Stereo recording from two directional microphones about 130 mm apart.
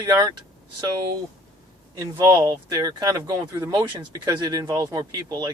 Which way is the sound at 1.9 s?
25° right (ahead or behind).